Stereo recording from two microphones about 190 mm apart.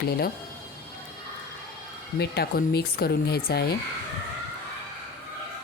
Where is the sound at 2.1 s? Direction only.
60° left (ahead or behind).